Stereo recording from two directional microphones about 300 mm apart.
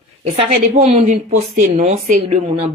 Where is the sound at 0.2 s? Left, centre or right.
Right.